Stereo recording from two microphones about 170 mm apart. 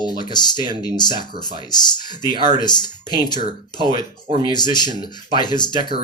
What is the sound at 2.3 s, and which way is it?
Speech, 30° right (ahead or behind).